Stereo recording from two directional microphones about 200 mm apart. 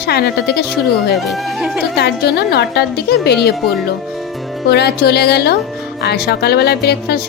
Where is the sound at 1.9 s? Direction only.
55° left (ahead or behind).